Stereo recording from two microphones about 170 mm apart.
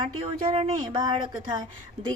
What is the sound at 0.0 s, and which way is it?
Speech, 30° right (ahead or behind).